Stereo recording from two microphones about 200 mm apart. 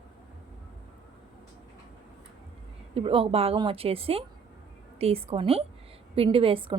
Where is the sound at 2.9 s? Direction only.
25° right (ahead or behind).